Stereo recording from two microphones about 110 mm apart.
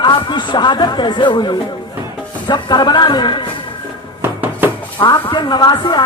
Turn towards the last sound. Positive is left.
turn(degrees=40)  # may be behind; listen again after turning